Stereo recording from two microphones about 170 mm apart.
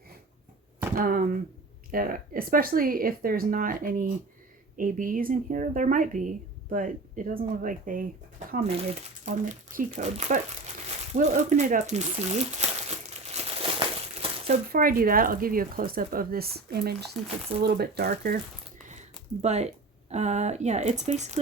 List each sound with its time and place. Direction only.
0.9 s speech: 55° right (ahead or behind)
8.6 s speech: 40° right (ahead or behind)
13.1 s crumpling: 35° right (ahead or behind)
14.7 s speech: 60° right (ahead or behind)
18.9 s speech: 40° right (ahead or behind)